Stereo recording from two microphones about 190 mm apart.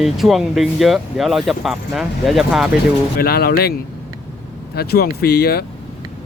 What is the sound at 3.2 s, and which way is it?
Speech, 55° left (ahead or behind).